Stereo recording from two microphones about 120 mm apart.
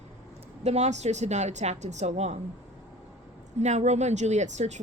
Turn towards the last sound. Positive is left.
turn(degrees=-75)  # may be behind; listen again after turning